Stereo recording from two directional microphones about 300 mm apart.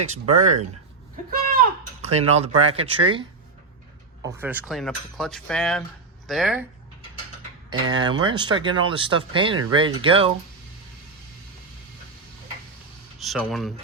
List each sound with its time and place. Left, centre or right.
0.0 s speech: right
2.0 s speech: right; by 6.7 s centre
7.7 s speech: centre
13.1 s speech: centre